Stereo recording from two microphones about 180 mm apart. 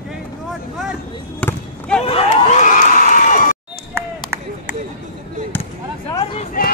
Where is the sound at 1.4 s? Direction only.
5° left (ahead or behind).